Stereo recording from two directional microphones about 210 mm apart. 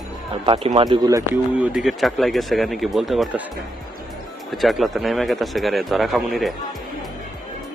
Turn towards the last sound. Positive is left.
turn(degrees=0)  # may be behind; listen again after turning